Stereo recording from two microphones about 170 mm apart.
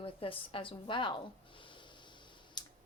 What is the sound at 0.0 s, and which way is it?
A woman's voice, 30° left (ahead or behind).